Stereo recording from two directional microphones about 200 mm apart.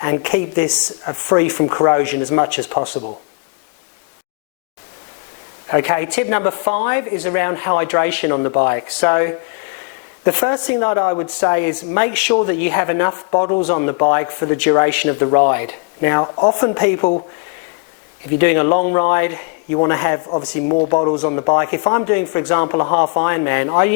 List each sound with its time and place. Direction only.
0.0 s speech: 15° left (ahead or behind)
5.6 s speech: 15° left (ahead or behind)
18.3 s speech: 15° left (ahead or behind)